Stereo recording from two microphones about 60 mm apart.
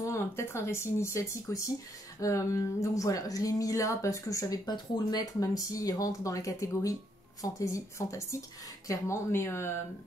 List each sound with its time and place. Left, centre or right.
0.0 s speech: left